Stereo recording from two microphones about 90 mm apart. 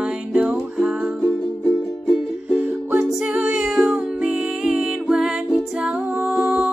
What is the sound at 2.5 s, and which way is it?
Music, 15° right (ahead or behind).